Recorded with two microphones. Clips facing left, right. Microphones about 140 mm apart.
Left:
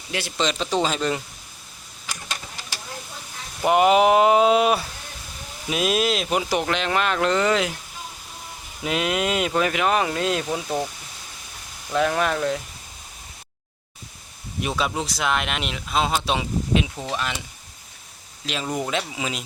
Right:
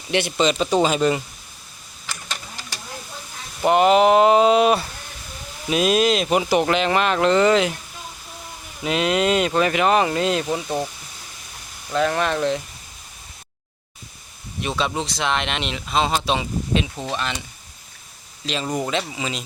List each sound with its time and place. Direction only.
0.1 s speech: 20° right (ahead or behind)
0.3 s speech: 5° right (ahead or behind)
3.7 s speech: 10° left (ahead or behind)
8.8 s speech: 5° left (ahead or behind)
11.9 s speech: 5° left (ahead or behind)
14.6 s speech: 5° left (ahead or behind)
18.4 s speech: 5° left (ahead or behind)